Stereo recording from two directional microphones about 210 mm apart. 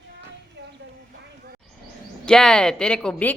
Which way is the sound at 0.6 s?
55° right (ahead or behind).